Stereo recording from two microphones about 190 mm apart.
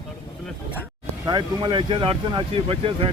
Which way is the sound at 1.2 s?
25° right (ahead or behind).